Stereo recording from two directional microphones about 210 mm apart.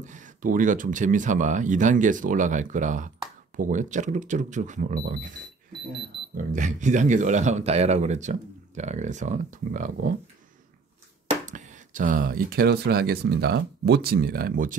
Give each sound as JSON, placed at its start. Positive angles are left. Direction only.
{"t": 0.0, "sound": "speech", "side_deg": -40}
{"t": 6.3, "sound": "speech", "side_deg": -35}
{"t": 11.4, "sound": "speech", "side_deg": -35}